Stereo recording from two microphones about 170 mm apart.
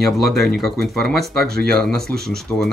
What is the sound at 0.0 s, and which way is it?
Speech, centre (ahead or behind).